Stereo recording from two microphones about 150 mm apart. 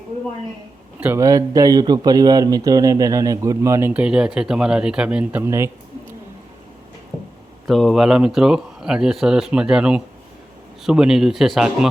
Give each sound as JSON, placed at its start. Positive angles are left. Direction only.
{"t": 0.9, "sound": "speech", "side_deg": -10}
{"t": 1.2, "sound": "speech", "side_deg": -20}
{"t": 7.7, "sound": "speech", "side_deg": 0}